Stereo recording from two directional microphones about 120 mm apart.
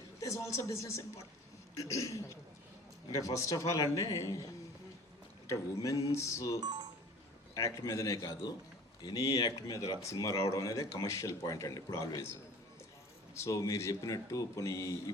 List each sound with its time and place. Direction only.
0.2 s speech: 25° left (ahead or behind)
6.6 s music: 35° right (ahead or behind)
7.5 s speech: 25° left (ahead or behind)
13.3 s speech: 25° left (ahead or behind)